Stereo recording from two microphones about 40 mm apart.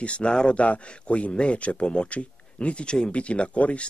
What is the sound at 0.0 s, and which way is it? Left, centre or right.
Speech, left.